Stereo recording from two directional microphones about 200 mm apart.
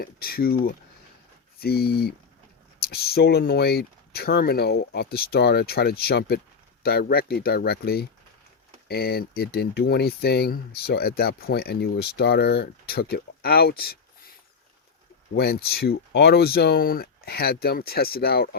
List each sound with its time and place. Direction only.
0.0 s speech: 50° left (ahead or behind)
15.4 s speech: 50° left (ahead or behind)